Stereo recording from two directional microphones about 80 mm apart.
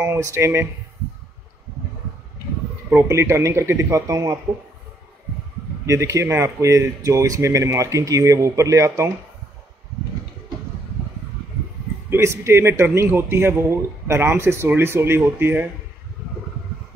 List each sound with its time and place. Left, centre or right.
0.0 s speech: right
3.1 s speech: right
5.9 s speech: right
12.1 s speech: right